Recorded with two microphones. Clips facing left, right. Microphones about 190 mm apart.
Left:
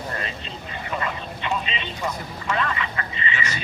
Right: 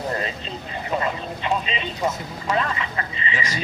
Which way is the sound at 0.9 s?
30° right (ahead or behind).